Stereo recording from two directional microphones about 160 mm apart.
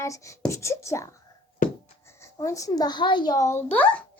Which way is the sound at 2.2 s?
20° left (ahead or behind).